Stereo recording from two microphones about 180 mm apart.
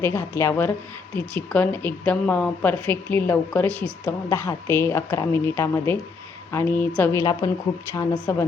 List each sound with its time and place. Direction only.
0.0 s a woman's voice: 15° left (ahead or behind)